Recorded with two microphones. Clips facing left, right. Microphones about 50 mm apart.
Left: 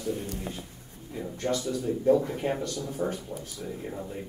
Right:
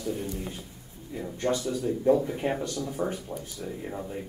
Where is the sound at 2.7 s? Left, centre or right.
Right.